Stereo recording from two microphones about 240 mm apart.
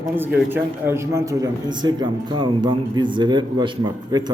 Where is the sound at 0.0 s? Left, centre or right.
Centre.